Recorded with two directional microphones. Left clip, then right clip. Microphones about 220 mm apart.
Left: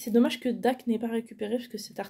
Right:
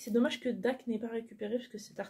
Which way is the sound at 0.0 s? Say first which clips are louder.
Left 6 dB; 35° left (ahead or behind).